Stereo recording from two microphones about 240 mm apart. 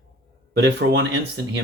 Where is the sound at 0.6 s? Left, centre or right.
Right.